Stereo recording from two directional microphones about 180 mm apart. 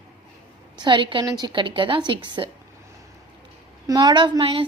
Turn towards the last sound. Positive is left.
turn(degrees=-30)  # may be behind; listen again after turning